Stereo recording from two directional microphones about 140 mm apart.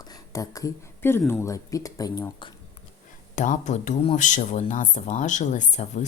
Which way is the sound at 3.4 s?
60° left (ahead or behind).